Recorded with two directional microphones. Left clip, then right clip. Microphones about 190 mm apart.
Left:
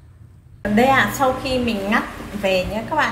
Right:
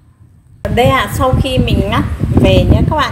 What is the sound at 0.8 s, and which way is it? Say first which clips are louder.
Speech: right 4 dB; 40° right (ahead or behind).